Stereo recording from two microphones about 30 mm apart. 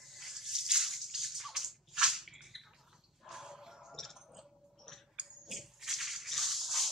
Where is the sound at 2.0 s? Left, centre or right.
Centre.